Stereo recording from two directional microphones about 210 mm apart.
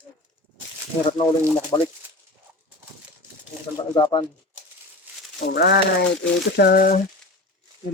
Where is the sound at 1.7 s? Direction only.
20° left (ahead or behind).